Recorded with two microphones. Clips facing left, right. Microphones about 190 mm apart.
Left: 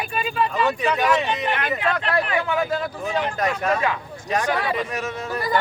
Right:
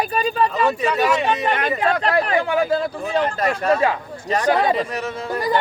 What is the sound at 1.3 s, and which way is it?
Speech, 35° right (ahead or behind).